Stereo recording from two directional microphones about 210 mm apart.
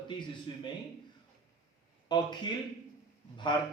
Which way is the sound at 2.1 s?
20° left (ahead or behind).